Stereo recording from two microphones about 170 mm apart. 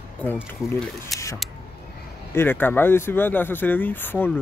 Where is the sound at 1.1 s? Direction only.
Centre (ahead or behind).